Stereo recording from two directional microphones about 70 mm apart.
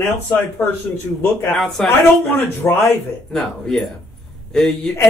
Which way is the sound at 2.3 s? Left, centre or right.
Left.